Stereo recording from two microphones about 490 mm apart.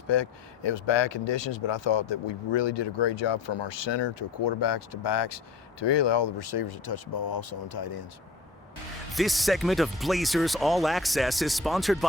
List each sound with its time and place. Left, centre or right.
0.1 s speech: left
9.1 s speech: centre